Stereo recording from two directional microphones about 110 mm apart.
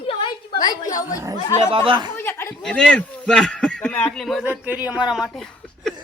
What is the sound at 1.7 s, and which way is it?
Speech, 55° right (ahead or behind).